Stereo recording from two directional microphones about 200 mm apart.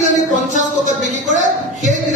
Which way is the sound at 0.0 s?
40° right (ahead or behind).